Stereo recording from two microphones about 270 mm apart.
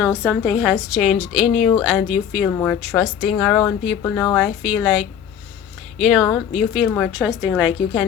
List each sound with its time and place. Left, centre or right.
0.0 s speech: centre
2.5 s speech: centre